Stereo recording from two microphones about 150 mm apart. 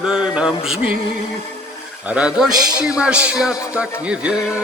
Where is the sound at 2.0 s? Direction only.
10° right (ahead or behind).